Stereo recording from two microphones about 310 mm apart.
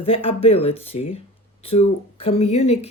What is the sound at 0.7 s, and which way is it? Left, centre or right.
Speech, left.